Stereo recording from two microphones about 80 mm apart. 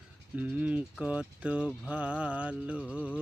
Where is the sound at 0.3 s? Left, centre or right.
Centre.